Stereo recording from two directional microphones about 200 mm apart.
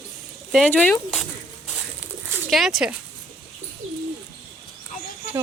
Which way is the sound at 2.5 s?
Centre (ahead or behind).